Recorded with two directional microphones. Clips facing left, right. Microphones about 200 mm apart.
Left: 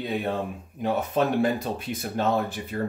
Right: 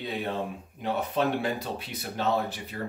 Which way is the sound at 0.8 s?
45° left (ahead or behind).